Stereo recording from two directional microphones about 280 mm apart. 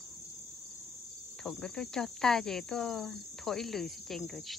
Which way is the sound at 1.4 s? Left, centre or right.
Centre.